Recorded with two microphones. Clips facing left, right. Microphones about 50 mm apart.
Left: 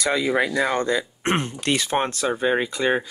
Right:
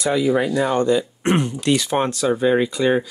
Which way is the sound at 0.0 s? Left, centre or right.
Left.